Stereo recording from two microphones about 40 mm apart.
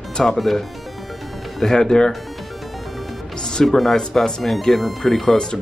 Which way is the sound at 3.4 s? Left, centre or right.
Centre.